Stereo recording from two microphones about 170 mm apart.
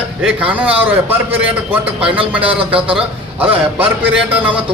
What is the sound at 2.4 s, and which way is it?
Speech, 35° right (ahead or behind).